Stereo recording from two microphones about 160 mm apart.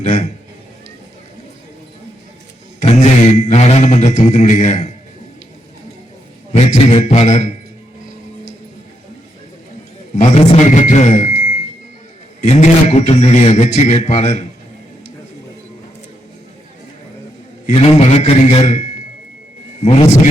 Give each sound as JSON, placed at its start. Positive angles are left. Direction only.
{"t": 0.0, "sound": "speech", "side_deg": 45}
{"t": 2.8, "sound": "mantra", "side_deg": 45}
{"t": 6.5, "sound": "speech", "side_deg": 45}
{"t": 10.2, "sound": "speech", "side_deg": 45}
{"t": 17.7, "sound": "a man's voice", "side_deg": 40}